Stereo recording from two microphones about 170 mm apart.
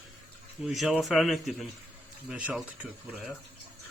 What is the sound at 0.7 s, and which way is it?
Speech, centre (ahead or behind).